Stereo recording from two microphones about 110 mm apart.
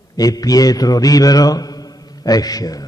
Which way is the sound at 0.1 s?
35° left (ahead or behind).